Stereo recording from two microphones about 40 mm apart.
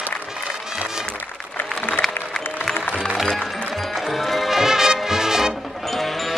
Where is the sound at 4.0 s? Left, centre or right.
Centre.